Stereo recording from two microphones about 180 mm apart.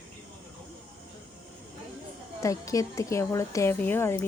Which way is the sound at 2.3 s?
20° left (ahead or behind).